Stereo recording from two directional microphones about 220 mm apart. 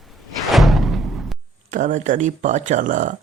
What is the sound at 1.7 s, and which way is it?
Speech, 35° right (ahead or behind).